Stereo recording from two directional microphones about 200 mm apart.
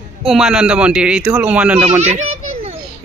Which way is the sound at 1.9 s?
35° right (ahead or behind).